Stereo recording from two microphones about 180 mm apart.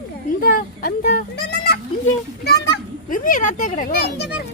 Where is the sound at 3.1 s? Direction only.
45° left (ahead or behind).